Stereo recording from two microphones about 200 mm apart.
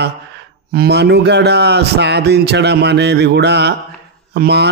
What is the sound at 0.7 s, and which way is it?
A man's voice, 50° right (ahead or behind).